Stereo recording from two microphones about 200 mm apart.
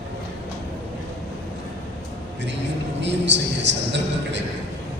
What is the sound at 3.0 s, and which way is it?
Speech, 60° right (ahead or behind).